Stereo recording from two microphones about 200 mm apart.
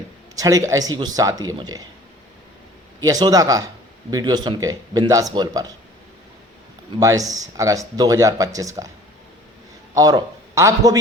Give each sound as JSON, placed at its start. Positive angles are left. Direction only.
{"t": 0.3, "sound": "speech", "side_deg": -15}
{"t": 3.0, "sound": "speech", "side_deg": -20}
{"t": 7.0, "sound": "speech", "side_deg": -15}
{"t": 9.9, "sound": "a man's voice", "side_deg": -20}